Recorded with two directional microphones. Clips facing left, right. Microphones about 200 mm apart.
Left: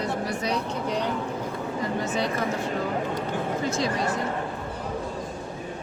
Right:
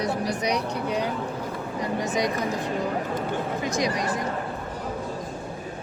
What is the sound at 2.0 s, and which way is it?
Speech, 15° right (ahead or behind).